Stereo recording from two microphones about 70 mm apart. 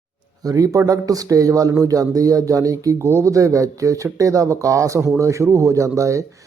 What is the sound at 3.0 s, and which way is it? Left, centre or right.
Speech, right.